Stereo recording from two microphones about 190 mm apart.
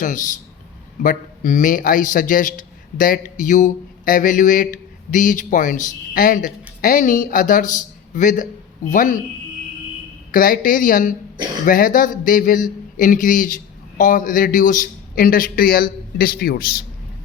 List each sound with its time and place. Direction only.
0.0 s a man's voice: 40° left (ahead or behind)
10.3 s a man's voice: 50° left (ahead or behind)